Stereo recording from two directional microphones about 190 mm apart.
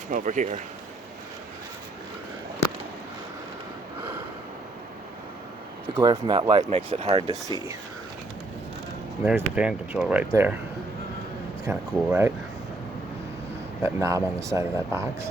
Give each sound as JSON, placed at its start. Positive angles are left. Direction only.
{"t": 0.1, "sound": "speech", "side_deg": -45}
{"t": 6.0, "sound": "speech", "side_deg": -20}
{"t": 6.6, "sound": "speech", "side_deg": -35}
{"t": 9.2, "sound": "speech", "side_deg": -5}
{"t": 11.6, "sound": "speech", "side_deg": -10}
{"t": 13.8, "sound": "speech", "side_deg": -15}